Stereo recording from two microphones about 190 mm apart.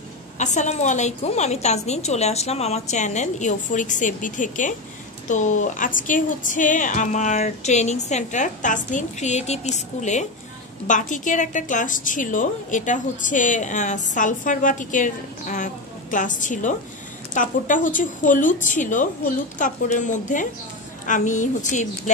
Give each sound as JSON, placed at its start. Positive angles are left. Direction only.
{"t": 0.4, "sound": "a woman's voice", "side_deg": 40}